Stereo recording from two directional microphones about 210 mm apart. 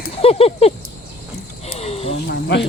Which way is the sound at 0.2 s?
30° left (ahead or behind).